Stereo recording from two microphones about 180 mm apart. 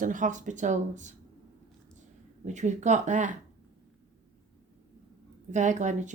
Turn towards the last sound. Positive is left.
turn(degrees=-40)  # may be behind; listen again after turning